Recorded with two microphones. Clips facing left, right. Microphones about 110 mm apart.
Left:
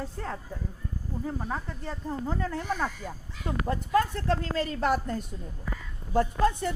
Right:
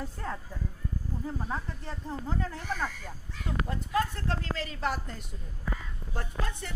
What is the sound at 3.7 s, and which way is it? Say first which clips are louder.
A woman's voice: left 6 dB; 45° left (ahead or behind).